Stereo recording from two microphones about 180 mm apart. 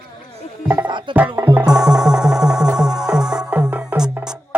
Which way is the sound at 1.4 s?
10° right (ahead or behind).